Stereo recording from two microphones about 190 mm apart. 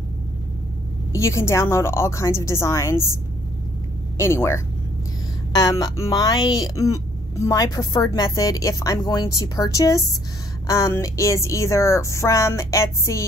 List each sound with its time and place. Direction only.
1.1 s a woman's voice: 15° left (ahead or behind)
4.2 s a woman's voice: 15° left (ahead or behind)